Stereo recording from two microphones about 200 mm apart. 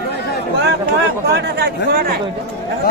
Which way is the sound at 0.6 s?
60° right (ahead or behind).